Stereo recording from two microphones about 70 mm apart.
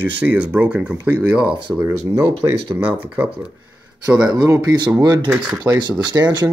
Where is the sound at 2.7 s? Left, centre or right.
Right.